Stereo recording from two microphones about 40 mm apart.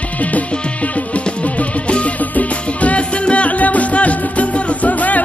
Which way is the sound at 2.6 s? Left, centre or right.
Left.